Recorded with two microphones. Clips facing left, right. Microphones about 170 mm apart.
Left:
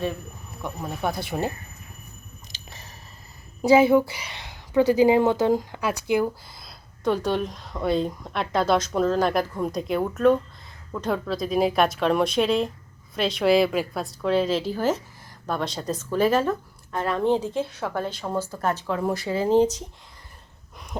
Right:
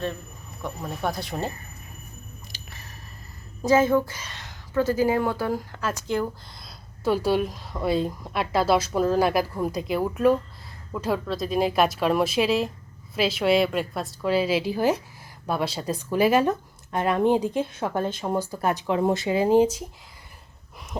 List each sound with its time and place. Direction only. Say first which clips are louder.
0.6 s speech: left 1 dB; 5° left (ahead or behind)
2.5 s chewing: even; 20° left (ahead or behind)
3.6 s speech: left 3 dB; 15° left (ahead or behind)
6.6 s speech: even; 5° right (ahead or behind)
20.9 s speech: even; centre (ahead or behind)